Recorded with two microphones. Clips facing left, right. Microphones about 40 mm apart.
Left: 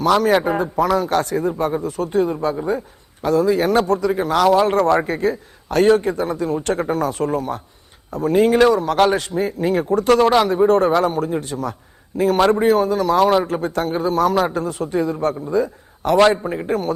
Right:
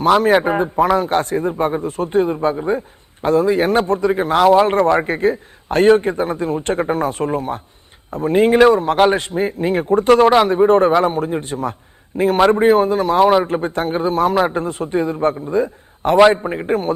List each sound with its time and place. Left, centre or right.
0.0 s a man's voice: right
15.5 s a sound: right
16.4 s a man's voice: right